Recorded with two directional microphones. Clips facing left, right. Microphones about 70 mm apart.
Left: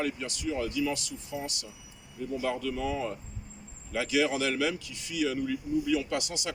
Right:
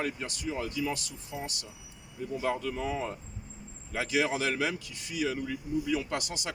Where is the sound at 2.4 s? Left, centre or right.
Right.